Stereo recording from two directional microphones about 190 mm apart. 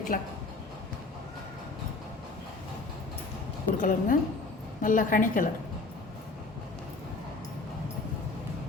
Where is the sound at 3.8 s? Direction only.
45° left (ahead or behind).